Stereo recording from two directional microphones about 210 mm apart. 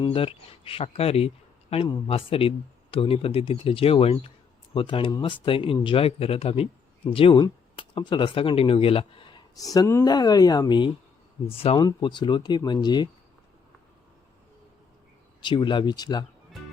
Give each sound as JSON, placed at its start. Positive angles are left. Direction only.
{"t": 0.0, "sound": "speech", "side_deg": 25}
{"t": 15.4, "sound": "speech", "side_deg": 20}